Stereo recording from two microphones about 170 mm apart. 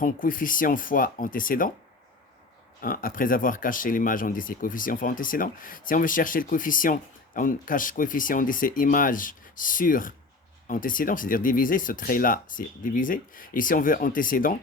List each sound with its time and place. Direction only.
0.0 s speech: 55° left (ahead or behind)
2.8 s speech: 55° left (ahead or behind)